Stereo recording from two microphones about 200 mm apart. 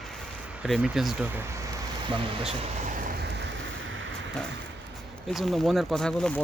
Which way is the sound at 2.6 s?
40° right (ahead or behind).